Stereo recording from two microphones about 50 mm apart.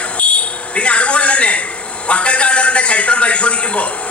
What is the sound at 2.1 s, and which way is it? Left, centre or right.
A man's voice, left.